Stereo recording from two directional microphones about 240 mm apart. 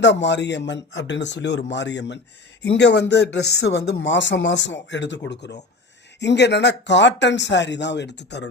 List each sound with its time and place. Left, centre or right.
0.0 s speech: left